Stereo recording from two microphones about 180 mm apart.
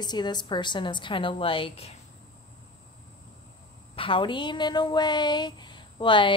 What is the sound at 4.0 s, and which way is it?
A woman's voice, 30° left (ahead or behind).